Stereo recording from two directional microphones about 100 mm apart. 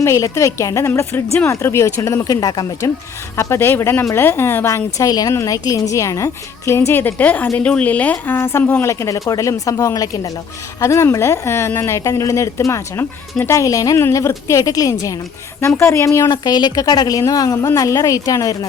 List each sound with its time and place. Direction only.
0.0 s a woman's voice: 30° left (ahead or behind)
3.3 s a woman's voice: 25° left (ahead or behind)
5.3 s a woman's voice: 25° left (ahead or behind)
16.3 s a woman's voice: 45° left (ahead or behind)